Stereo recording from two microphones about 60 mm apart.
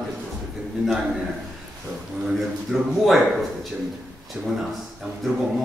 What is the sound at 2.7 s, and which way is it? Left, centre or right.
Speech, centre.